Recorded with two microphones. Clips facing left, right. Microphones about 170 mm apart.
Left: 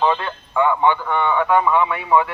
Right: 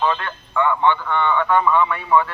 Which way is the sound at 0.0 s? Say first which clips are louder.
Left 2 dB; 15° left (ahead or behind).